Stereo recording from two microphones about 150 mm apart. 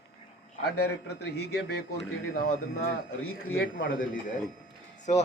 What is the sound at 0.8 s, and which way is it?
A man's voice, 90° left.